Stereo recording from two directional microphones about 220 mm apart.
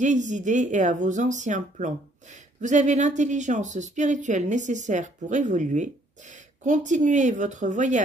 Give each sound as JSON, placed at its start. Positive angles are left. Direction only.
{"t": 0.0, "sound": "speech", "side_deg": -35}